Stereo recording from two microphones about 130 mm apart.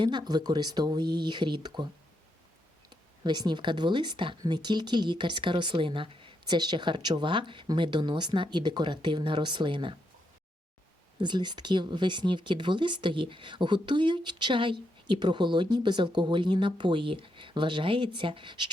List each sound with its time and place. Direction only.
0.0 s speech: 35° right (ahead or behind)
2.9 s speech: 35° right (ahead or behind)
11.2 s speech: 35° right (ahead or behind)